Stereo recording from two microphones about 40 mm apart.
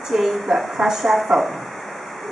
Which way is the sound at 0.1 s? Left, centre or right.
Centre.